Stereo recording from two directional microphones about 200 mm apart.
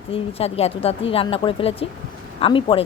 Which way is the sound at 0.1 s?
30° left (ahead or behind).